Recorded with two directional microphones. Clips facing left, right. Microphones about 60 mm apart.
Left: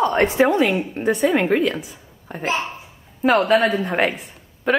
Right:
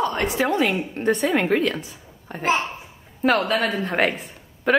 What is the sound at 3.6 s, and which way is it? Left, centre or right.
Speech, left.